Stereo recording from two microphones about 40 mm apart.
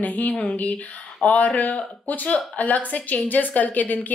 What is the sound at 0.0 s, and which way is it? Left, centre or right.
A woman's voice, left.